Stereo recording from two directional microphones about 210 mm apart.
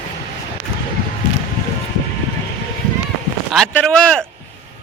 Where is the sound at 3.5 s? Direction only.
5° left (ahead or behind).